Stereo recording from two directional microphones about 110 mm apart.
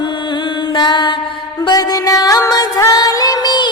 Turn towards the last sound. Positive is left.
turn(degrees=40)  # may be behind; listen again after turning